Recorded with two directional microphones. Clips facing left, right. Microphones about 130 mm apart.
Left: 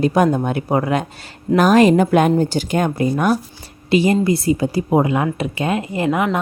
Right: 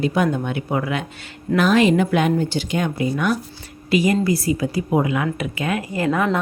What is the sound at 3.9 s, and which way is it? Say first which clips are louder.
A woman's voice: left 3 dB; 30° left (ahead or behind).